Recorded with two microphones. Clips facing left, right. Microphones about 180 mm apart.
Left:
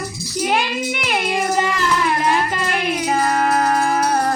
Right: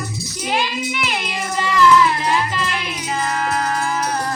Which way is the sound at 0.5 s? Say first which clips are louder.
Left 1 dB; 50° left (ahead or behind).